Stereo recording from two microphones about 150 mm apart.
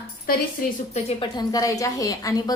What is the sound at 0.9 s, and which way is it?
Speech, 45° left (ahead or behind).